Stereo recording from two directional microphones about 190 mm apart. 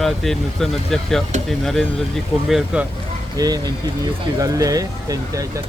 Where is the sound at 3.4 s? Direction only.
20° right (ahead or behind).